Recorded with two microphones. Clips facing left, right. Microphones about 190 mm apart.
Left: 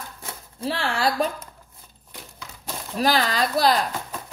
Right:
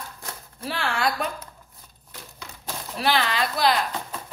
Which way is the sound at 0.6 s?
30° left (ahead or behind).